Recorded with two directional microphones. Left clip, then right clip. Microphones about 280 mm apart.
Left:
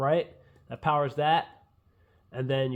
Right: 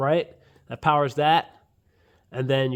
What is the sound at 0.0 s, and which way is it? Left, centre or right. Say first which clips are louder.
Speech: right 3 dB; right.